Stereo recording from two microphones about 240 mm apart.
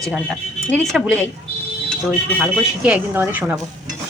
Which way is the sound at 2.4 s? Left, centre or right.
Centre.